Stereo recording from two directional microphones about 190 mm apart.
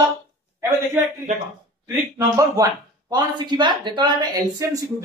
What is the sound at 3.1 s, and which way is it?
Speech, 25° right (ahead or behind).